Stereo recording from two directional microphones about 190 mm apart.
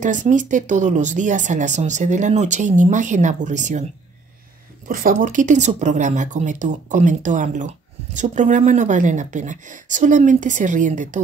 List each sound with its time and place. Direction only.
0.0 s speech: 40° right (ahead or behind)
4.8 s speech: 45° right (ahead or behind)